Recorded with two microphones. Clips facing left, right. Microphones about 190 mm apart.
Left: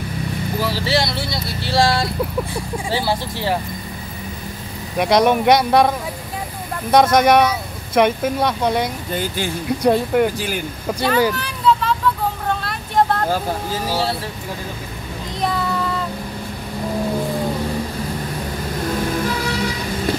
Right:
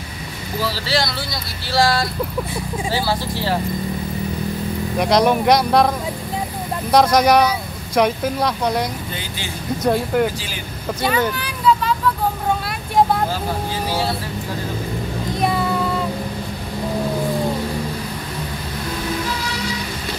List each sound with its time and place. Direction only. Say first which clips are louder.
0.8 s speech: left 2 dB; 25° left (ahead or behind)
4.9 s speech: left 1 dB; centre (ahead or behind)
6.9 s speech: left 1 dB; centre (ahead or behind)
9.8 s speech: left 2 dB; centre (ahead or behind)
12.4 s vehicle: right 2 dB; 5° right (ahead or behind)
15.4 s child singing: right 1 dB; 5° right (ahead or behind)